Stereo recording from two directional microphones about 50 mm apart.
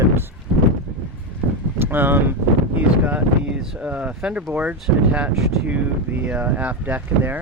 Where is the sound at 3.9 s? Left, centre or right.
Right.